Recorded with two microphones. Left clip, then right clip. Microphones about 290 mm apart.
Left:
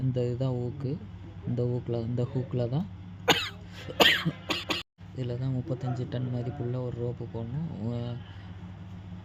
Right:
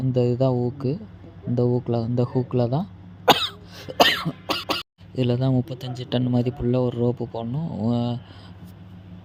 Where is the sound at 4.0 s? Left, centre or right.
Centre.